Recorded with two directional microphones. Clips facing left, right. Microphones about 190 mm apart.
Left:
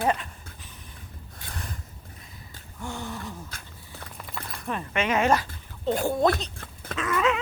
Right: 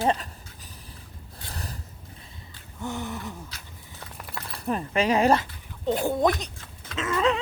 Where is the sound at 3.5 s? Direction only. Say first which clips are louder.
Left 2 dB; 50° left (ahead or behind).